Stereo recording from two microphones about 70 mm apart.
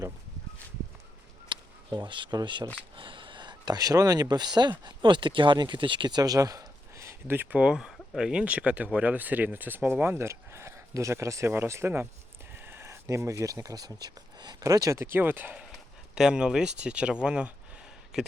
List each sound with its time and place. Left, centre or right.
1.5 s a sound: right
2.0 s speech: right
7.5 s speech: centre; by 12.0 s right
12.5 s a sound: right
13.8 s speech: right
14.6 s speech: right
15.0 s speech: right
16.1 s speech: centre